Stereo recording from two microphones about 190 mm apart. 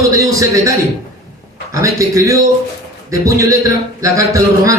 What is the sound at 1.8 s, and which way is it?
Speech, 15° right (ahead or behind).